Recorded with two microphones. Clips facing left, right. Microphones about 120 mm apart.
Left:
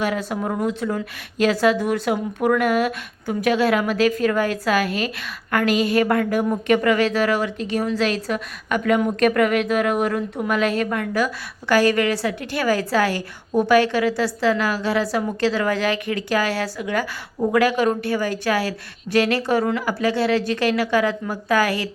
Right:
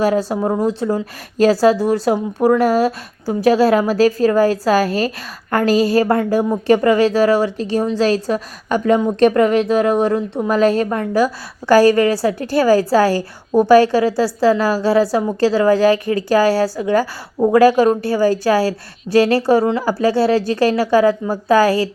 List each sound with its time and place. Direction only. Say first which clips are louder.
0.0 s speech: right 7 dB; 35° right (ahead or behind)